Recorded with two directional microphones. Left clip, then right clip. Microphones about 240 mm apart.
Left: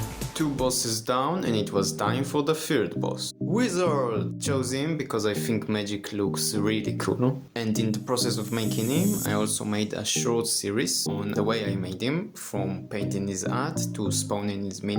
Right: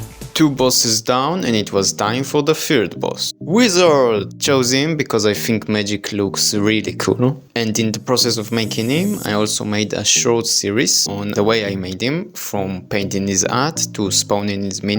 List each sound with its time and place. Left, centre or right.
0.3 s speech: right